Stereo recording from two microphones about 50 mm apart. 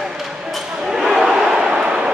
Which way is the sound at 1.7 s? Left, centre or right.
Centre.